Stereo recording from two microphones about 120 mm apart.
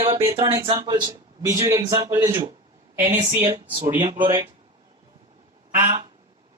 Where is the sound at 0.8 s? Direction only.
35° right (ahead or behind).